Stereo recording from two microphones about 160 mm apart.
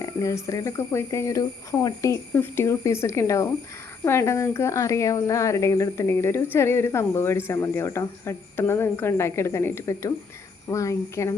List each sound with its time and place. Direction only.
0.0 s speech: 20° left (ahead or behind)